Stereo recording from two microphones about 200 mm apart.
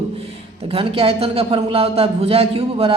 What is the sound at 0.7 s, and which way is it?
A man's voice, 30° right (ahead or behind).